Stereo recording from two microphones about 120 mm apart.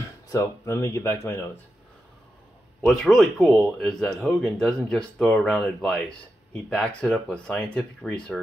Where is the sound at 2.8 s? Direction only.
5° left (ahead or behind).